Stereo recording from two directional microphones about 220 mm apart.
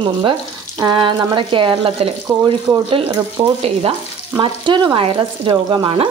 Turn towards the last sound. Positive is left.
turn(degrees=-20)  # may be behind; listen again after turning